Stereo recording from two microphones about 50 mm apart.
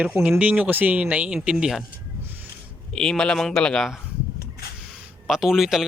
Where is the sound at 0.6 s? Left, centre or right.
Right.